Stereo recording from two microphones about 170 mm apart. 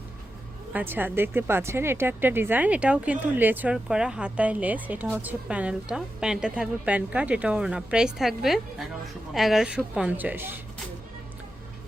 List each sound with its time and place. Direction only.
0.7 s speech: 10° right (ahead or behind)